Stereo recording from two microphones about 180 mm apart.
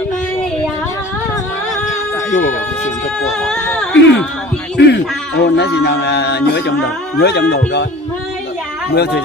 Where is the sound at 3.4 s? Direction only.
5° left (ahead or behind).